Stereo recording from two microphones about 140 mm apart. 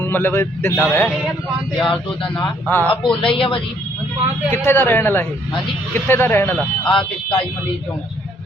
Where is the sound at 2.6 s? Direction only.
15° left (ahead or behind).